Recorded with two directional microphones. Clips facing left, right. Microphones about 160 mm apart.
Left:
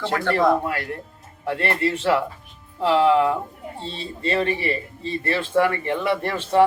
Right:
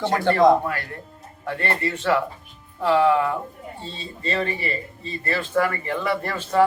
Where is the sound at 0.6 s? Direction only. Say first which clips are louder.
Left 1 dB; 25° left (ahead or behind).